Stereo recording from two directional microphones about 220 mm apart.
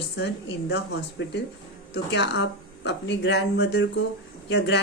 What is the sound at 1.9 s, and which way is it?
A man's voice, 50° left (ahead or behind).